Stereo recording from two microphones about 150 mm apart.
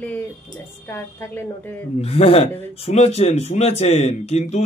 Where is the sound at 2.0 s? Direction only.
40° left (ahead or behind).